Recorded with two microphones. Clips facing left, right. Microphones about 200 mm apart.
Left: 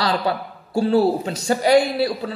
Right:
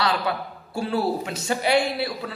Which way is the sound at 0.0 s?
30° left (ahead or behind).